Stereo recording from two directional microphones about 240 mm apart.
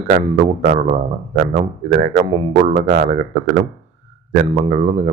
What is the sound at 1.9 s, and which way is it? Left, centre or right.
Speech, right.